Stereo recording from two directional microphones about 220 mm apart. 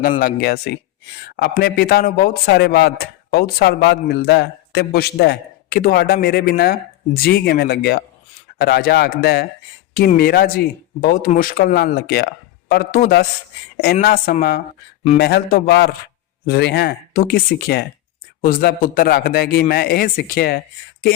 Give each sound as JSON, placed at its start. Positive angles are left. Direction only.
{"t": 0.2, "sound": "a woman's voice", "side_deg": 40}